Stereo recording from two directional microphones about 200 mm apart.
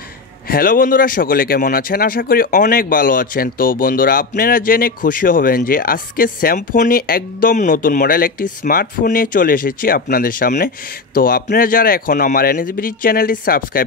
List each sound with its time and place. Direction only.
0.5 s speech: 45° left (ahead or behind)